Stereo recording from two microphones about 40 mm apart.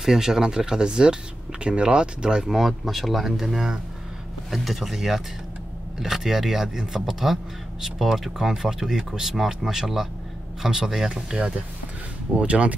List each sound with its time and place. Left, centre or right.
0.0 s speech: centre
2.8 s speech: centre
12.4 s speech: right